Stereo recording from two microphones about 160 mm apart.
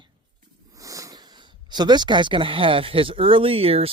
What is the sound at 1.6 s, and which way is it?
Speech, 25° right (ahead or behind).